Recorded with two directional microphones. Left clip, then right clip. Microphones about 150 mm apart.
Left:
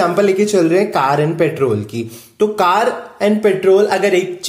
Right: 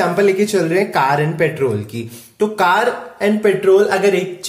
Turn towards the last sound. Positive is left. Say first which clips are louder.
# left 1 dB
turn(degrees=35)  # may be behind; listen again after turning